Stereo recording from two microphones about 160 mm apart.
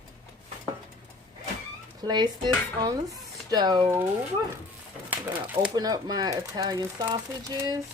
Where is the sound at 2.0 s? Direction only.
25° right (ahead or behind).